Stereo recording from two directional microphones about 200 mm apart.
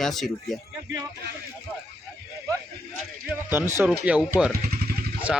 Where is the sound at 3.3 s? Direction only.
10° right (ahead or behind).